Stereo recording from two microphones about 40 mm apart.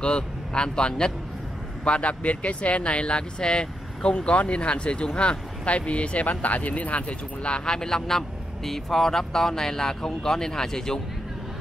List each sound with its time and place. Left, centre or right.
0.0 s speech: left